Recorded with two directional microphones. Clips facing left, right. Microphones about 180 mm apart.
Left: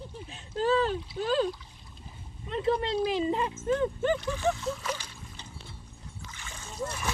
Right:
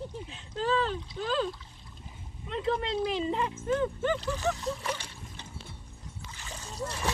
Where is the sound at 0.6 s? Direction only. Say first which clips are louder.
Left 3 dB; 40° left (ahead or behind).